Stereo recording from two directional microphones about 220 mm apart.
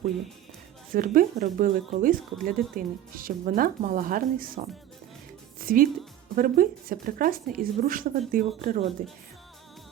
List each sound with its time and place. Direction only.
0.9 s a woman's voice: 40° right (ahead or behind)